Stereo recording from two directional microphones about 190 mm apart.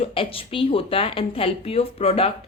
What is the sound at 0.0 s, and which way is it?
Speech, 30° left (ahead or behind).